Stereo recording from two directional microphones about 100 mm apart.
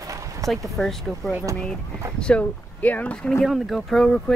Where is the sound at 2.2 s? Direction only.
10° left (ahead or behind).